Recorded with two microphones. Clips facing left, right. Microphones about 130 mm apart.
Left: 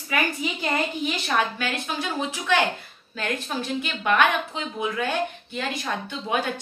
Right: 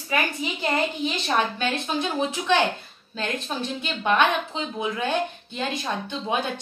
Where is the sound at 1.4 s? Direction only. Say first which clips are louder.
Right 1 dB; 25° right (ahead or behind).